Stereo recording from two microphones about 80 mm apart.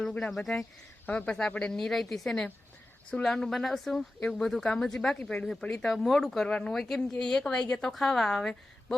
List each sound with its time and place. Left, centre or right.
0.0 s speech: centre
1.0 s speech: centre